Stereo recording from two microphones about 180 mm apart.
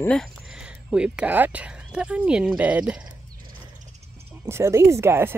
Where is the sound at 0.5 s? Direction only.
5° right (ahead or behind).